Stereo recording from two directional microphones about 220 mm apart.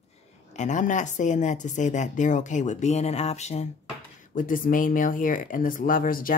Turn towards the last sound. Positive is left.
turn(degrees=40)  # may be behind; listen again after turning